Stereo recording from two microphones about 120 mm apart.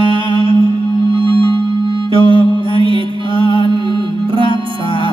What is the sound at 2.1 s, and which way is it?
Mantra, 45° right (ahead or behind).